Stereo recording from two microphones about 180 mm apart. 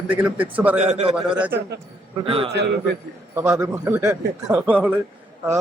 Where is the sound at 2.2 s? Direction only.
30° right (ahead or behind).